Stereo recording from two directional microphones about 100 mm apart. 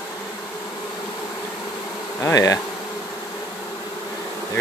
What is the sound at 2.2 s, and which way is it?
Bee, 35° left (ahead or behind).